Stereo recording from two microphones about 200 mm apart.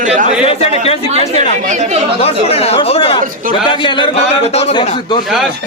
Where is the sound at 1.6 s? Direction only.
40° right (ahead or behind).